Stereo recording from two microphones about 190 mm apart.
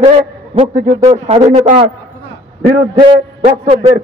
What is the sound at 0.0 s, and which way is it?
A man's voice, 30° right (ahead or behind).